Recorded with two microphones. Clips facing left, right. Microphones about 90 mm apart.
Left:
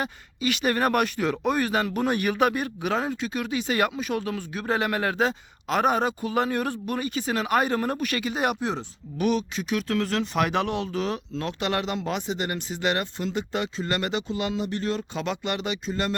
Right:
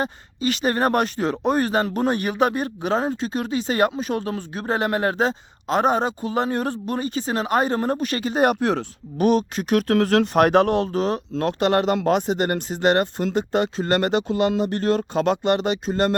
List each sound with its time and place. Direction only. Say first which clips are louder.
0.0 s speech: right 4 dB; 35° right (ahead or behind); by 8.8 s 55° right (ahead or behind)
9.1 s speech: right 6 dB; 40° right (ahead or behind)